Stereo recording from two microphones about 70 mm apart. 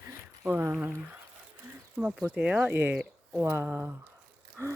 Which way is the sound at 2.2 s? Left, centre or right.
Centre.